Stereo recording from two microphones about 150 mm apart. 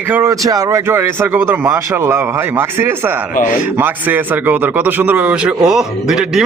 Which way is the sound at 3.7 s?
15° right (ahead or behind).